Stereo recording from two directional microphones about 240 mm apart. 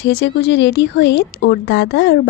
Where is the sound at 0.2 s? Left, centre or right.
Left.